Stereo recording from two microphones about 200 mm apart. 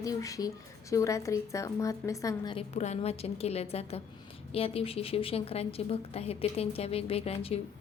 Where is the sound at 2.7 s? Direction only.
35° left (ahead or behind).